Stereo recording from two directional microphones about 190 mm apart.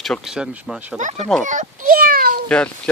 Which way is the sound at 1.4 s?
45° right (ahead or behind).